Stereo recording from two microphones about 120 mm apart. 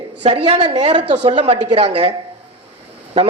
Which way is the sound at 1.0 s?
70° right (ahead or behind).